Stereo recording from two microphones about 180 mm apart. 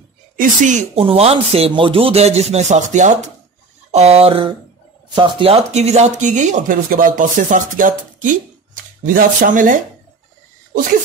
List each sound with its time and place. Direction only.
0.4 s speech: 45° right (ahead or behind)